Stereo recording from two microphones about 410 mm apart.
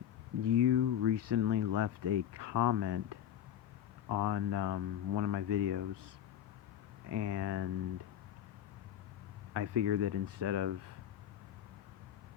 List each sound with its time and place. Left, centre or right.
0.4 s speech: right
4.2 s speech: right
7.1 s speech: right
9.5 s speech: right